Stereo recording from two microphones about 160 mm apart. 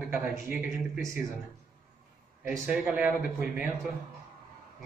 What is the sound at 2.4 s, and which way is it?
A man's voice, 5° right (ahead or behind).